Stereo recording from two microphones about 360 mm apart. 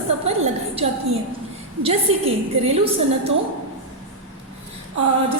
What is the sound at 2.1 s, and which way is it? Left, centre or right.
A woman's voice, centre.